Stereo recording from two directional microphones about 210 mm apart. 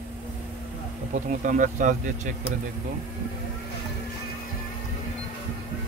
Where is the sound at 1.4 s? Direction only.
35° right (ahead or behind).